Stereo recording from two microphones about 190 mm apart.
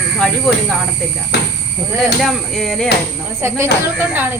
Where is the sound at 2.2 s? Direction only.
Centre (ahead or behind).